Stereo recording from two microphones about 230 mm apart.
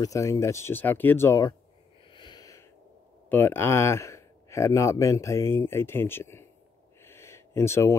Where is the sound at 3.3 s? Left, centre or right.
Centre.